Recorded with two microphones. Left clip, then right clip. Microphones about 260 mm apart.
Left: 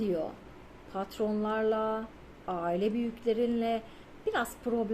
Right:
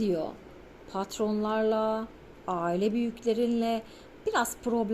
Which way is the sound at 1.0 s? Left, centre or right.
Right.